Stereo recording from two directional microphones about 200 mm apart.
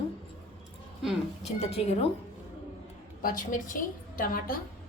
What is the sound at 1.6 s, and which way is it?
Speech, 30° left (ahead or behind).